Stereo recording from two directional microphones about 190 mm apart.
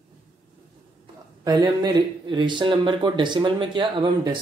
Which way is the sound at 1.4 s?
20° right (ahead or behind).